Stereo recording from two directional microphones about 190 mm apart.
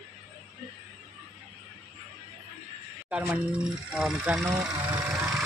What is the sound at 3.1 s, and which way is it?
Speech, 5° right (ahead or behind).